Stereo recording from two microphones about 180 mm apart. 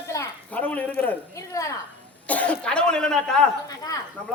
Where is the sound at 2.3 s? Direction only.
10° left (ahead or behind).